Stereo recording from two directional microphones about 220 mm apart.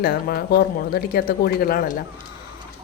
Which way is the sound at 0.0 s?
45° left (ahead or behind).